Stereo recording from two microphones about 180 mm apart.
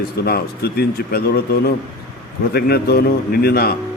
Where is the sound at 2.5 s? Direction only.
60° left (ahead or behind).